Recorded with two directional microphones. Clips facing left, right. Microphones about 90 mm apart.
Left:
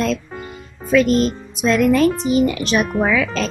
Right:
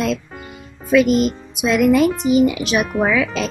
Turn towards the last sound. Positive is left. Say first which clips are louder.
# even
turn(degrees=-10)  # may be behind; listen again after turning